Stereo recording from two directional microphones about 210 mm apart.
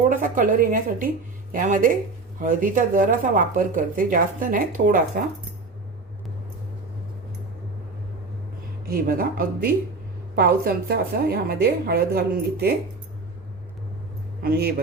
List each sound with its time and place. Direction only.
0.1 s speech: 40° right (ahead or behind)
8.9 s a woman's voice: 45° right (ahead or behind)
14.4 s a woman's voice: 45° right (ahead or behind)